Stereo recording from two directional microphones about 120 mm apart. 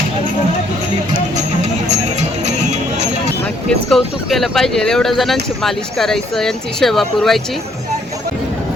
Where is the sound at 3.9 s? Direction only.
Centre (ahead or behind).